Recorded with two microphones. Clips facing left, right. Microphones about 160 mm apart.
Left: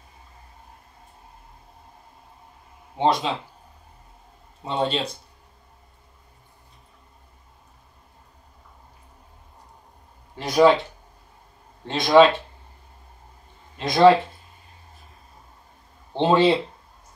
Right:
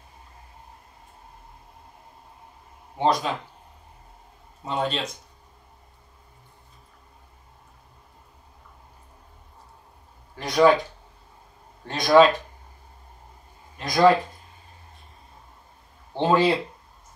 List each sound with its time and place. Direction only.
3.0 s speech: 25° left (ahead or behind)
4.6 s speech: 30° left (ahead or behind)
10.6 s speech: 20° left (ahead or behind)
13.7 s speech: 25° left (ahead or behind)
16.1 s speech: 20° left (ahead or behind)